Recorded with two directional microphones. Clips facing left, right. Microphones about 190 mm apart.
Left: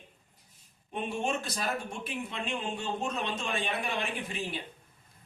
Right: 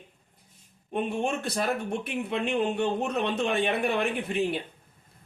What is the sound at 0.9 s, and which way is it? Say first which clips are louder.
Speech: right 4 dB; 60° right (ahead or behind).